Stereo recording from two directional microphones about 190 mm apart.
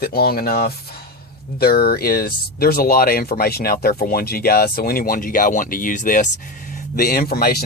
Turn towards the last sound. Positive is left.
turn(degrees=55)  # may be behind; listen again after turning